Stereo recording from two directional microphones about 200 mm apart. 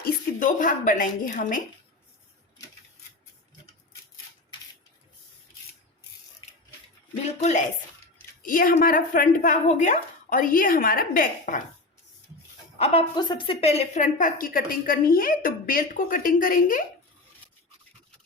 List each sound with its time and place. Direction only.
0.0 s a woman's voice: 40° left (ahead or behind)
8.4 s a woman's voice: 45° left (ahead or behind)
12.8 s a woman's voice: 30° left (ahead or behind)